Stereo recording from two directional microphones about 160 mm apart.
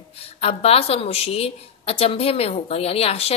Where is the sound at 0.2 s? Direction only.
40° left (ahead or behind).